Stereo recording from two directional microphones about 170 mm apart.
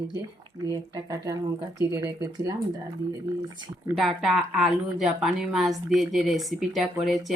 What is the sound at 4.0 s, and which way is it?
A woman's voice, centre (ahead or behind).